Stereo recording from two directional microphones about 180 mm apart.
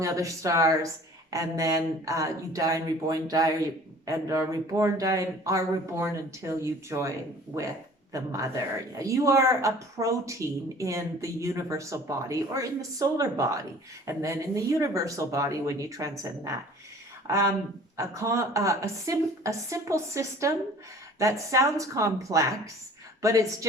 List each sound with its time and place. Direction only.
0.0 s speech: 20° right (ahead or behind)
8.1 s speech: 20° right (ahead or behind)